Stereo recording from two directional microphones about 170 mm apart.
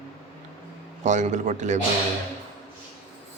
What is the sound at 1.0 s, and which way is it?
Speech, 45° right (ahead or behind).